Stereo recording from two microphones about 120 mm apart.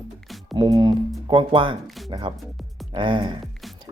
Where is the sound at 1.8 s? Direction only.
Centre (ahead or behind).